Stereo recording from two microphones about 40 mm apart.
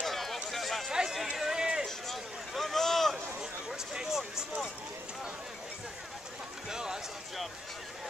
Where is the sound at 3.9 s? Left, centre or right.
Centre.